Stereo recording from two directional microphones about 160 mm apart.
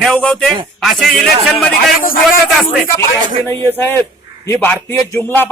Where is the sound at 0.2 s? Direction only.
5° left (ahead or behind).